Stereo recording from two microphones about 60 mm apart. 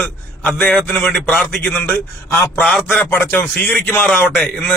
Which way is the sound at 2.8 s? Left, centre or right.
Left.